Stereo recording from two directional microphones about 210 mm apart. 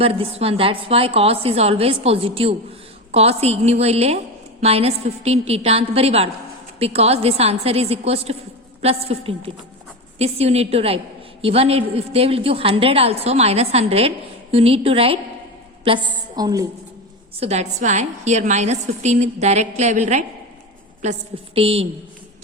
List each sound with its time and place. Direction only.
0.0 s a woman's voice: 25° right (ahead or behind)
17.4 s a woman's voice: 30° right (ahead or behind)